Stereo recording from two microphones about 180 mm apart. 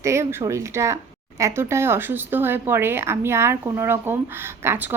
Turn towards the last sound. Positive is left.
turn(degrees=-10)  # may be behind; listen again after turning